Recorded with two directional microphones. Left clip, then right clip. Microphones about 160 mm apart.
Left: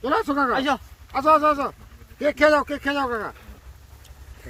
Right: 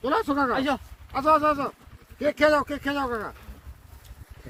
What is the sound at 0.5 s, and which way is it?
Speech, 45° left (ahead or behind).